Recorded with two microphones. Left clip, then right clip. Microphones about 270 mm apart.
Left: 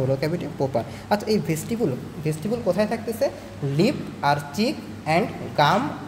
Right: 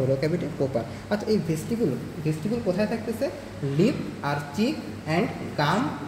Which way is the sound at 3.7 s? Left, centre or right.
Left.